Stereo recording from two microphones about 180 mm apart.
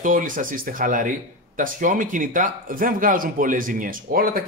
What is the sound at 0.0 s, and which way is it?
Speech, 45° right (ahead or behind).